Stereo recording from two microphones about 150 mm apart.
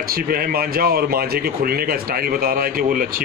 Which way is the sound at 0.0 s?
80° right.